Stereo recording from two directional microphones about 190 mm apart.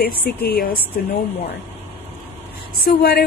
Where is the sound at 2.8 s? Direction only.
55° left (ahead or behind).